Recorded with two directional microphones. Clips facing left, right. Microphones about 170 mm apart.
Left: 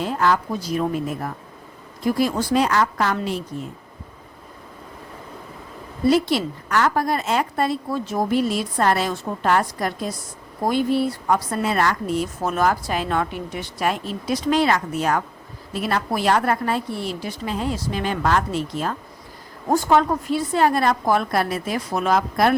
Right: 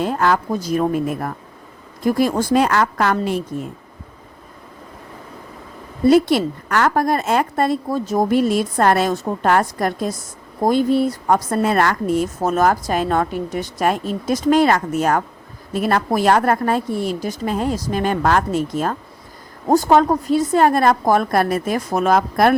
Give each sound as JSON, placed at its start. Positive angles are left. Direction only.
{"t": 0.0, "sound": "speech", "side_deg": -50}
{"t": 6.1, "sound": "speech", "side_deg": -50}